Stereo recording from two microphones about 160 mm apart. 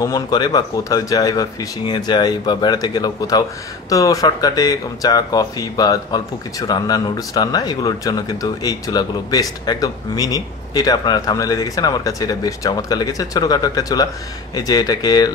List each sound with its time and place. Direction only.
0.0 s speech: 25° left (ahead or behind)